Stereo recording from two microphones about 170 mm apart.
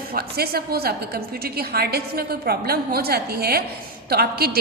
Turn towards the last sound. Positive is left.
turn(degrees=-65)  # may be behind; listen again after turning